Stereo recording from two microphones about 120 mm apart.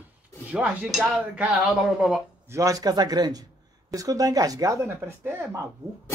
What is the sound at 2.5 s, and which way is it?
Speech, 30° right (ahead or behind).